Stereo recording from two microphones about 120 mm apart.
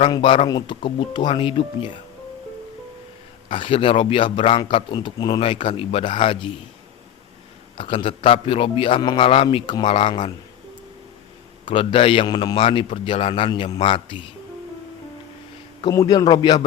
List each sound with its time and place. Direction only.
0.1 s a man's voice: 45° left (ahead or behind)
3.5 s a man's voice: 45° left (ahead or behind)
7.8 s a man's voice: 45° left (ahead or behind)
11.6 s a man's voice: 45° left (ahead or behind)
15.8 s a man's voice: 35° left (ahead or behind)